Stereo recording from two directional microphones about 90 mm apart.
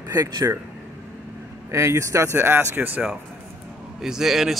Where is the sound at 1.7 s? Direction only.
35° right (ahead or behind).